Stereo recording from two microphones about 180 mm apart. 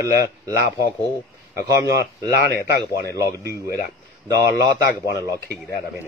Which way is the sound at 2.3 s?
60° left (ahead or behind).